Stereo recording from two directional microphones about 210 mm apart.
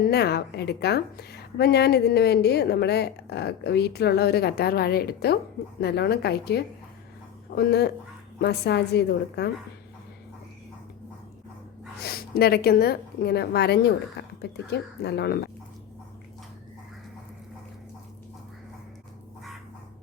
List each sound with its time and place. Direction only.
0.1 s a woman's voice: 50° left (ahead or behind)
11.9 s a woman's voice: 45° left (ahead or behind)